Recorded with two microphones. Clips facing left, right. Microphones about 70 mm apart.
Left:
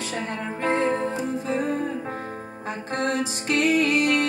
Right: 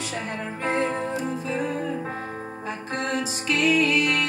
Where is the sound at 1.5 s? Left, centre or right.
Left.